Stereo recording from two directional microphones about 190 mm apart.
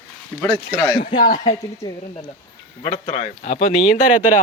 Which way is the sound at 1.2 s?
45° left (ahead or behind).